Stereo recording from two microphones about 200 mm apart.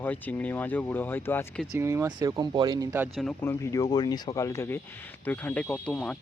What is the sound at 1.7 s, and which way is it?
Speech, 15° right (ahead or behind).